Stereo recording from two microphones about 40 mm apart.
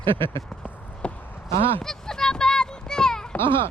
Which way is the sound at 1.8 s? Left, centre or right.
Centre.